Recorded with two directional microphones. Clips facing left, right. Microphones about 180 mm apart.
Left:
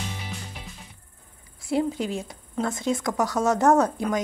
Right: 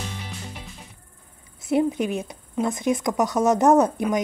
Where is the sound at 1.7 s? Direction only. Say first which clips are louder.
Right 3 dB; 20° right (ahead or behind).